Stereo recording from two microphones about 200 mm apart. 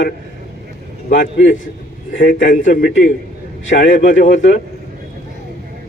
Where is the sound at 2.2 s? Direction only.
40° left (ahead or behind).